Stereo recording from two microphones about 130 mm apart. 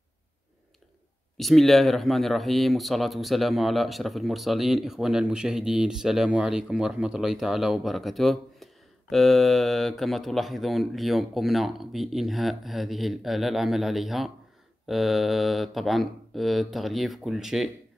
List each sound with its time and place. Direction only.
1.3 s speech: centre (ahead or behind)